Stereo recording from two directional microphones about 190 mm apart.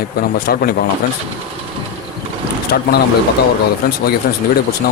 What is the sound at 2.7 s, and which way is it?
Speech, 60° left (ahead or behind).